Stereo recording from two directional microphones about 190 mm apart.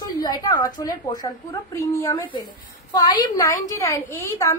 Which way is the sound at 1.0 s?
20° left (ahead or behind).